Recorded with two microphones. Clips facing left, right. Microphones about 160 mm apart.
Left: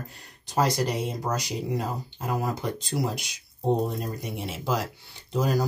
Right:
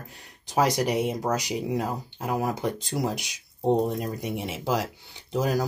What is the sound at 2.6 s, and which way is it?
Speech, 15° right (ahead or behind).